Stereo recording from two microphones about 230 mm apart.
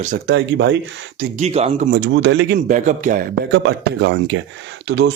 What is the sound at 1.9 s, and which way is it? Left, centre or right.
Speech, right.